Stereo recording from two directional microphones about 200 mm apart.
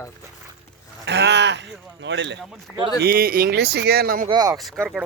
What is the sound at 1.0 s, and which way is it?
Speech, 60° right (ahead or behind).